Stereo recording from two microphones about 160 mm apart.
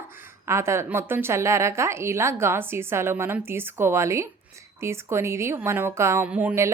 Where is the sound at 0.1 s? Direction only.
15° right (ahead or behind).